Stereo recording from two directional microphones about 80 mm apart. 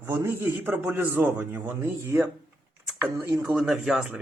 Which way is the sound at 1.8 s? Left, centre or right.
Right.